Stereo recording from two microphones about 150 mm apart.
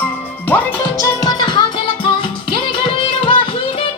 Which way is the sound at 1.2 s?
30° left (ahead or behind).